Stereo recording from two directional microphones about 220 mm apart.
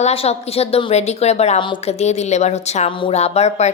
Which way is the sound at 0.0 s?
25° left (ahead or behind).